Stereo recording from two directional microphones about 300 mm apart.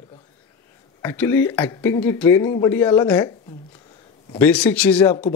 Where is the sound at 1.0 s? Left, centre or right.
Centre.